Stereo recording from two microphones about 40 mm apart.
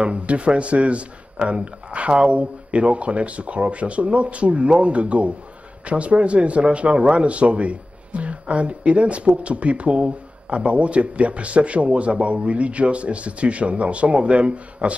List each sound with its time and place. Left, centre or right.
0.0 s a man's voice: right